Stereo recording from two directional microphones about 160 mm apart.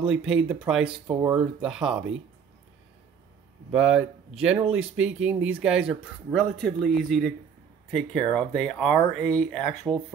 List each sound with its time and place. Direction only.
0.1 s speech: 5° right (ahead or behind)
1.0 s speech: 30° right (ahead or behind)
1.6 s speech: 5° right (ahead or behind)
3.7 s a man's voice: 5° right (ahead or behind)